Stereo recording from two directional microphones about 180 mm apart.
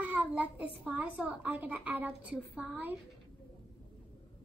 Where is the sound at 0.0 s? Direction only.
10° right (ahead or behind).